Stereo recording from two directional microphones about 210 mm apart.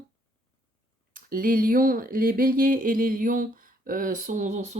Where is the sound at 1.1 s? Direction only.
45° right (ahead or behind).